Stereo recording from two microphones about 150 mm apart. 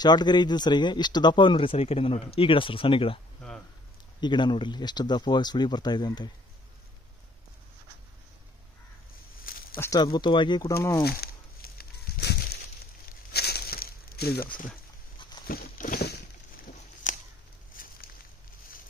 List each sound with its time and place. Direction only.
0.0 s speech: 30° left (ahead or behind)
4.2 s speech: 30° left (ahead or behind)
9.4 s a sound: 75° left (ahead or behind)
9.8 s speech: 25° left (ahead or behind)
10.7 s speech: 20° left (ahead or behind)
11.1 s a sound: 90° left; by 17.9 s 65° left (ahead or behind)